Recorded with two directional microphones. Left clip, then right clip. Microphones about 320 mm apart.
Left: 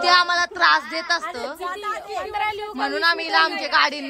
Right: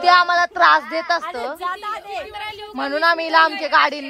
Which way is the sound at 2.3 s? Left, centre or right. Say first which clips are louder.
Left 6 dB; centre.